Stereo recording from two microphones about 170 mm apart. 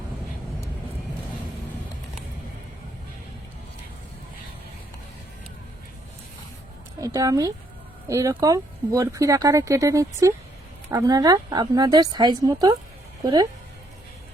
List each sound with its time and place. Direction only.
7.0 s speech: 20° right (ahead or behind)